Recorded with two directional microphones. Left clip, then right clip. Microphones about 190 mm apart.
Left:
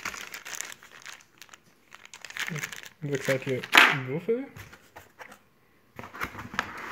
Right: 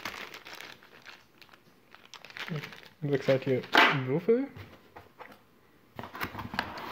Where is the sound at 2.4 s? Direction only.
5° left (ahead or behind).